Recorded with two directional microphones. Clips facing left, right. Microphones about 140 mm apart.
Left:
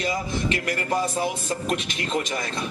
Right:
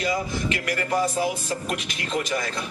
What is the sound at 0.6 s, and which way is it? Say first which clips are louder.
A man's voice: right 1 dB; 30° left (ahead or behind).